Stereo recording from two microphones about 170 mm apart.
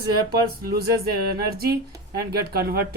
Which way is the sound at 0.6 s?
65° right (ahead or behind).